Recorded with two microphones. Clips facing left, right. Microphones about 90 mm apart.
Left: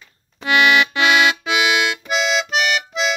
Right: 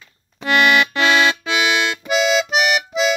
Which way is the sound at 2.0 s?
10° right (ahead or behind).